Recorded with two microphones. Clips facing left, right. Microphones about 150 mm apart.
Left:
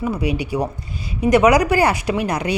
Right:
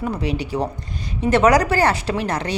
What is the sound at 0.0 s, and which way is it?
A woman's voice, 10° left (ahead or behind).